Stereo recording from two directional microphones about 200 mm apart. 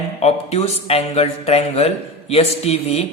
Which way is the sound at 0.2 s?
30° left (ahead or behind).